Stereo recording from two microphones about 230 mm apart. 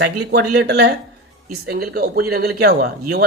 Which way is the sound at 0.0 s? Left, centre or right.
Right.